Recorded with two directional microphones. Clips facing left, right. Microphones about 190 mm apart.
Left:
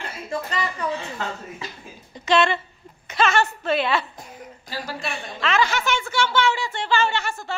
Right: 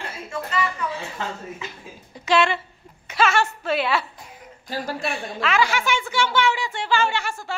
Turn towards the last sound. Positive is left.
turn(degrees=-10)  # may be behind; listen again after turning